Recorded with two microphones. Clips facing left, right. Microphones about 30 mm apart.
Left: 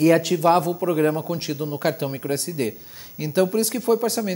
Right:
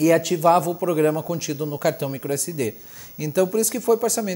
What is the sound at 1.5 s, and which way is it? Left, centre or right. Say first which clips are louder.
Speech: even; centre.